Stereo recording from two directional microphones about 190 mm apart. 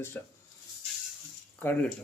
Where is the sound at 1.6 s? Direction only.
10° left (ahead or behind).